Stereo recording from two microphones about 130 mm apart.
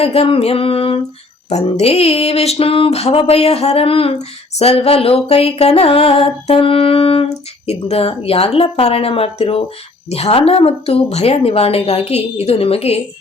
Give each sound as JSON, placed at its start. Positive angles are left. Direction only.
{"t": 0.0, "sound": "a woman's voice", "side_deg": 50}
{"t": 1.5, "sound": "a woman's voice", "side_deg": 60}